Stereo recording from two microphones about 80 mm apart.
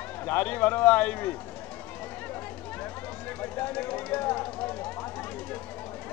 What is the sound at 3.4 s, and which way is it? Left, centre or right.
Speech, centre.